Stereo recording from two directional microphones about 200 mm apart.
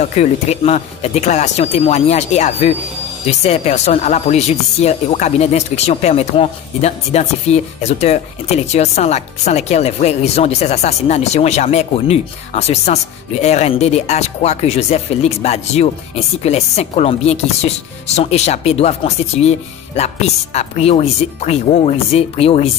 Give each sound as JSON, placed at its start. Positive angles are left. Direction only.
{"t": 0.0, "sound": "speech", "side_deg": 35}